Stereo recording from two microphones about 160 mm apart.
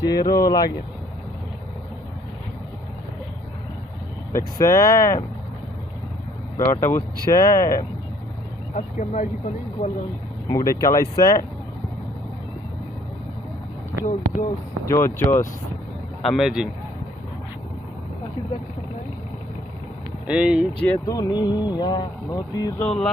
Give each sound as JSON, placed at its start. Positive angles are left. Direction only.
{"t": 0.1, "sound": "speech", "side_deg": 25}
{"t": 4.3, "sound": "speech", "side_deg": 15}
{"t": 6.7, "sound": "speech", "side_deg": 15}
{"t": 8.7, "sound": "speech", "side_deg": 50}
{"t": 10.5, "sound": "speech", "side_deg": 20}
{"t": 14.0, "sound": "speech", "side_deg": 55}
{"t": 14.8, "sound": "speech", "side_deg": 15}
{"t": 16.2, "sound": "speech", "side_deg": 0}
{"t": 20.2, "sound": "speech", "side_deg": -5}
{"t": 20.8, "sound": "speech", "side_deg": 15}
{"t": 22.8, "sound": "speech", "side_deg": 5}